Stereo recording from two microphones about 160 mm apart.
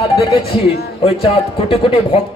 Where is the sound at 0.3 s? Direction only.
35° left (ahead or behind).